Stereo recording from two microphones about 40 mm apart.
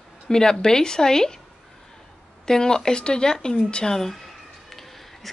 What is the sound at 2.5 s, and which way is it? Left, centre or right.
Speech, centre.